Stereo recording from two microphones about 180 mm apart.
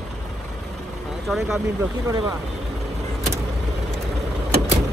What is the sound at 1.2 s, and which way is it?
Speech, centre (ahead or behind).